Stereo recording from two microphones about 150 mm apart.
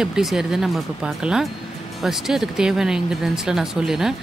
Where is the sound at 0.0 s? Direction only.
5° right (ahead or behind).